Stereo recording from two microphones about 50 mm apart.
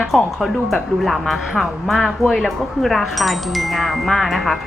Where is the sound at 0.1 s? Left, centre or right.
Centre.